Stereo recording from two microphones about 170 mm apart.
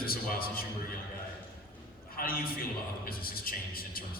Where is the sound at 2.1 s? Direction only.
60° left (ahead or behind).